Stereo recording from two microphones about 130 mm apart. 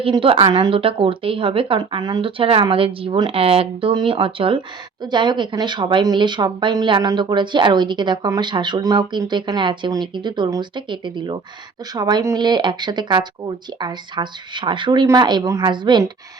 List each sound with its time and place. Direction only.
0.0 s speech: 45° right (ahead or behind)